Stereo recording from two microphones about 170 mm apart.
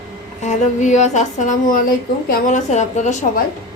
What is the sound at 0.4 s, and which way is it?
A woman's voice, 45° left (ahead or behind).